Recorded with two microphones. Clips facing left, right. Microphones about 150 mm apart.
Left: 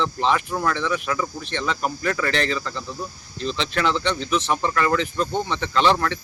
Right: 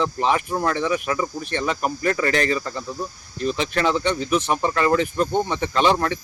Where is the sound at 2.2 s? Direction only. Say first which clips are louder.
Right 3 dB; 45° right (ahead or behind).